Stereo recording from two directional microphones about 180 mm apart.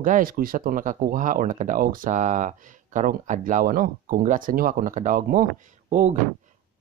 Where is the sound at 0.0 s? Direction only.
50° right (ahead or behind).